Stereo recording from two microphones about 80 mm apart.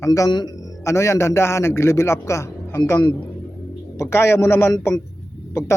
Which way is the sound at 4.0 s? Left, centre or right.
Left.